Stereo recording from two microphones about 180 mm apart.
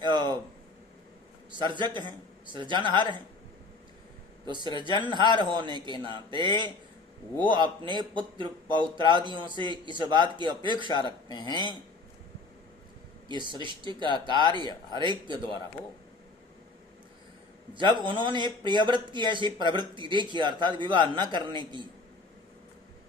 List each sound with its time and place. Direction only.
0.0 s a sound: 25° right (ahead or behind)
1.7 s a man's voice: 25° right (ahead or behind)
4.4 s a man's voice: 25° right (ahead or behind)
11.3 s speech: 20° left (ahead or behind)
13.2 s a man's voice: 25° right (ahead or behind)
17.7 s a man's voice: 25° right (ahead or behind)